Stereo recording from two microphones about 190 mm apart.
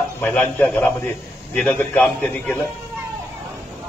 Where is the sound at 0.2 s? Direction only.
10° left (ahead or behind).